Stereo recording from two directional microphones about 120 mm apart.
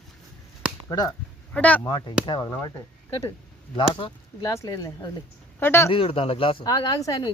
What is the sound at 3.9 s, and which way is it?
Speech, 40° left (ahead or behind).